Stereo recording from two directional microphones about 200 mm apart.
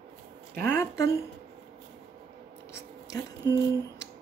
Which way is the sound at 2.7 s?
15° left (ahead or behind).